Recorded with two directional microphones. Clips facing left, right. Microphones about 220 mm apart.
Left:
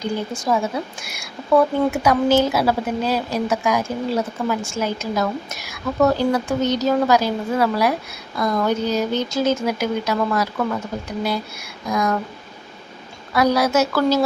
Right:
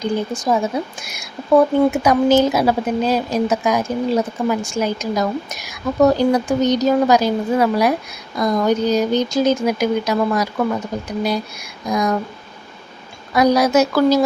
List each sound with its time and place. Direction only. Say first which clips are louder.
0.0 s speech: right 4 dB; 20° right (ahead or behind)
11.9 s speech: right 2 dB; 15° right (ahead or behind)
13.3 s speech: right 3 dB; 15° right (ahead or behind)